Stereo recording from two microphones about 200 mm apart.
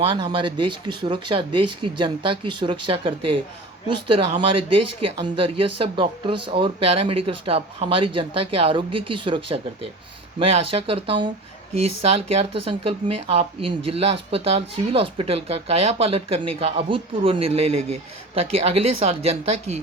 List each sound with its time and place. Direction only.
0.0 s speech: 25° right (ahead or behind)